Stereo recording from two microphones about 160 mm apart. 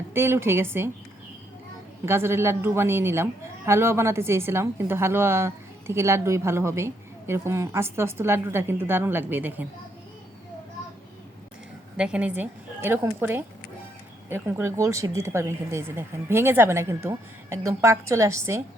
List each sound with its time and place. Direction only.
0.1 s a woman's voice: 15° right (ahead or behind)
2.0 s a woman's voice: 15° right (ahead or behind)
11.9 s a woman's voice: 5° right (ahead or behind)